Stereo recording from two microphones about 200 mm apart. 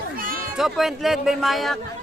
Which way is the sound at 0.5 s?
Centre (ahead or behind).